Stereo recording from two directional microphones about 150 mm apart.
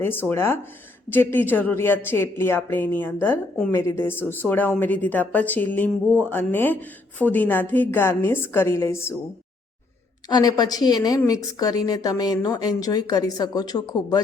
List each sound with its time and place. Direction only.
0.0 s speech: 15° left (ahead or behind)
10.2 s speech: 25° left (ahead or behind)